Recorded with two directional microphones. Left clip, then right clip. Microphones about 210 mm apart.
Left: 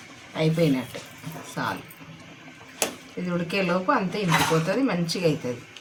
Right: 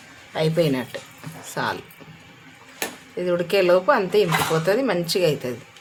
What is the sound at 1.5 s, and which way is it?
Speech, 55° right (ahead or behind).